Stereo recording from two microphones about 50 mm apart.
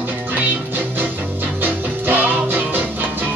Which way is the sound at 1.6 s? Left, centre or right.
Right.